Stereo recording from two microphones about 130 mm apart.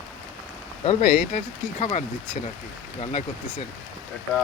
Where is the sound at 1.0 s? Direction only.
90° left.